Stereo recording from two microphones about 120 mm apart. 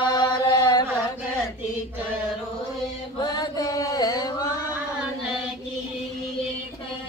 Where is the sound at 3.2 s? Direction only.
30° left (ahead or behind).